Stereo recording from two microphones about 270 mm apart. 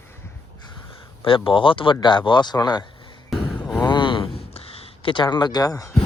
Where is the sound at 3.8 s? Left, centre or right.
Centre.